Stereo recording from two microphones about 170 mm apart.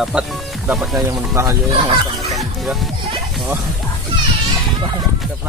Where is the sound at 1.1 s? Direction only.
20° right (ahead or behind).